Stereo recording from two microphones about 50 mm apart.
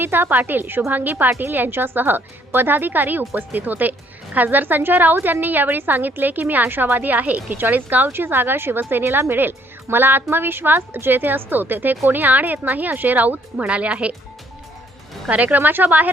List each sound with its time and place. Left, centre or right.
0.0 s speech: right
7.5 s speech: right
8.0 s a woman's voice: right
15.3 s speech: right